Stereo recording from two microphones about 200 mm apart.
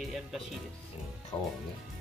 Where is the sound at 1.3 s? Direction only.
20° left (ahead or behind).